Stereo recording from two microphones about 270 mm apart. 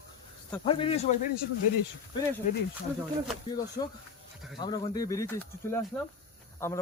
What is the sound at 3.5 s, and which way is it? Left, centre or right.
Speech, centre.